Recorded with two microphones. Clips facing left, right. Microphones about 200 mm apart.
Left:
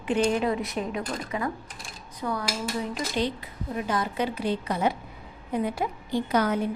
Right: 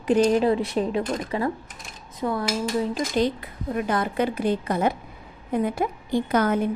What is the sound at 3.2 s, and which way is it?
A woman's voice, 50° right (ahead or behind).